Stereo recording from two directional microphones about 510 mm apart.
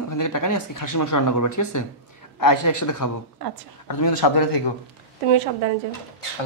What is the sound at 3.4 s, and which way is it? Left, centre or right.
Speech, right.